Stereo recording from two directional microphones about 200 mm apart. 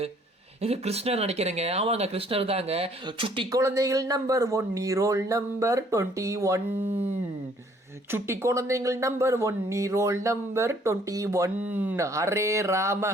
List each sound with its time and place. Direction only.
0.6 s speech: 30° right (ahead or behind); by 6.6 s 15° right (ahead or behind)
8.1 s speech: 15° right (ahead or behind)